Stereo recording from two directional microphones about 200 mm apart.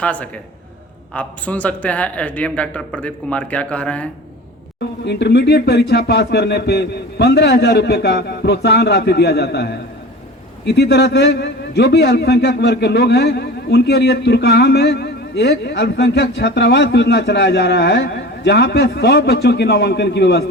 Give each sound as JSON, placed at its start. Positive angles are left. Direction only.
{"t": 0.0, "sound": "speech", "side_deg": 5}
{"t": 4.8, "sound": "a man's voice", "side_deg": 55}